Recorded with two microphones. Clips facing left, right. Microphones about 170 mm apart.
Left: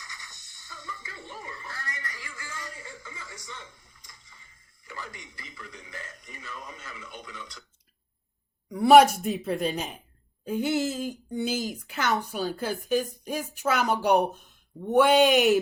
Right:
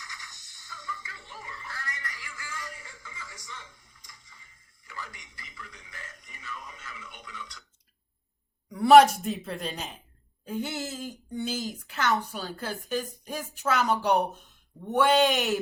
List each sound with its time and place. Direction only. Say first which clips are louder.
0.1 s music: even; 25° left (ahead or behind)
4.9 s a man's voice: left 2 dB; 30° left (ahead or behind)
9.0 s a man's voice: even; 20° left (ahead or behind)